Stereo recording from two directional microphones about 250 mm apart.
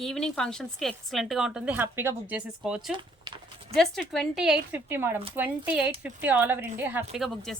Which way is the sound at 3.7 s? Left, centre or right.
Centre.